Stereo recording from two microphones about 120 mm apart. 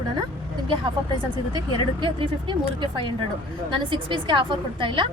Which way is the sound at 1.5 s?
40° right (ahead or behind).